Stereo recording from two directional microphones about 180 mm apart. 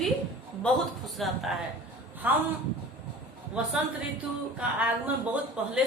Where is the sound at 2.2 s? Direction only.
10° right (ahead or behind).